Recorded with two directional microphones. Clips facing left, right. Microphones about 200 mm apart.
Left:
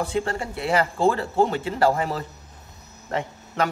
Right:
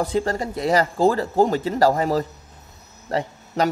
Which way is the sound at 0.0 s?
40° right (ahead or behind).